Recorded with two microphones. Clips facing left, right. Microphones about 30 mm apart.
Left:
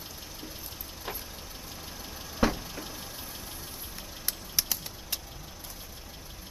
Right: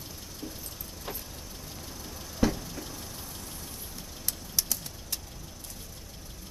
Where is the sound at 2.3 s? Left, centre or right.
Centre.